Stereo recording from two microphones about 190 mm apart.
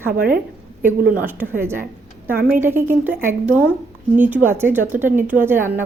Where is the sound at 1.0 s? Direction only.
50° right (ahead or behind).